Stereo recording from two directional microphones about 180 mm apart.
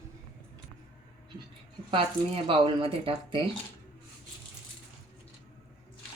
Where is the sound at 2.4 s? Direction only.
30° right (ahead or behind).